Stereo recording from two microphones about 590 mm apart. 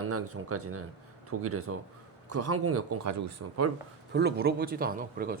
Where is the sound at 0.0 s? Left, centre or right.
Right.